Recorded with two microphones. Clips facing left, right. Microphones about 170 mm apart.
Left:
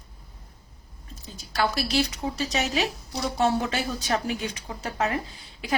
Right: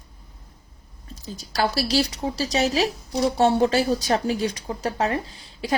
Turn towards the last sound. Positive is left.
turn(degrees=-35)  # may be behind; listen again after turning